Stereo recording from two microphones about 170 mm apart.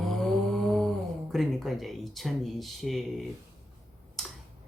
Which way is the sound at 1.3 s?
Centre (ahead or behind).